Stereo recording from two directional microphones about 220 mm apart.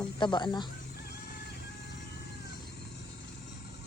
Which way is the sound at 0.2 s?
20° left (ahead or behind).